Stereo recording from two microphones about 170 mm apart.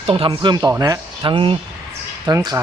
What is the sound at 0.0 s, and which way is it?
A man's voice, 35° right (ahead or behind).